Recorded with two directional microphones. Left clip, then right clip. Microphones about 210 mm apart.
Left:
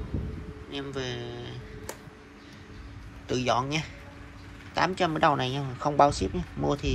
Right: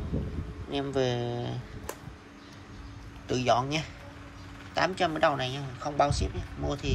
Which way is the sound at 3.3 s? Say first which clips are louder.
Right 1 dB; 15° right (ahead or behind).